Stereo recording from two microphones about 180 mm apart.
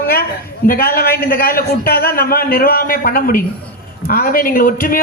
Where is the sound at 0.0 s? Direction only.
55° left (ahead or behind).